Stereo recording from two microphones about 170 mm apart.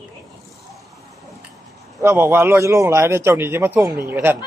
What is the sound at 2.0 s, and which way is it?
A man's voice, 15° right (ahead or behind).